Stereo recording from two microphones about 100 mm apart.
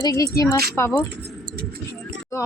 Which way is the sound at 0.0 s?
35° left (ahead or behind).